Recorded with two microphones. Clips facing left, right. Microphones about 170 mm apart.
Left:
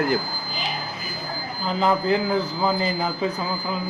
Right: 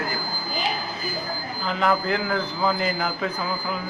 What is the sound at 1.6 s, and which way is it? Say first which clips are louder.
Speech: left 2 dB; 35° left (ahead or behind).